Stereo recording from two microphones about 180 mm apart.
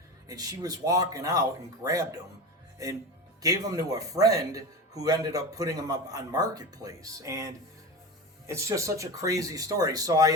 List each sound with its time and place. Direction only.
0.3 s speech: 20° right (ahead or behind)
3.4 s speech: 20° right (ahead or behind)